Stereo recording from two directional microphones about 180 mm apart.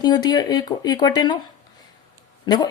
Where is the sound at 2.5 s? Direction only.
25° left (ahead or behind).